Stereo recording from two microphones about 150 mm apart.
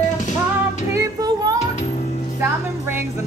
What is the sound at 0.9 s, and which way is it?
Music, 25° right (ahead or behind).